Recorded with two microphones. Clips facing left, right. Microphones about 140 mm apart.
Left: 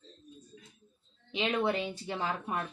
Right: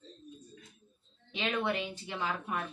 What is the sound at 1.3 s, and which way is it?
Speech, 25° left (ahead or behind).